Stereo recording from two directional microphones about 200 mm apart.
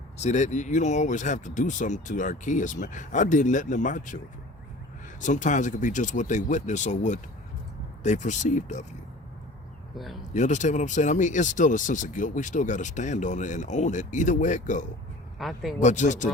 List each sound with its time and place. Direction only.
0.2 s speech: 35° left (ahead or behind)
5.2 s speech: 40° left (ahead or behind)
10.3 s speech: 35° left (ahead or behind)
15.4 s a man's voice: centre (ahead or behind)
15.8 s speech: 35° left (ahead or behind)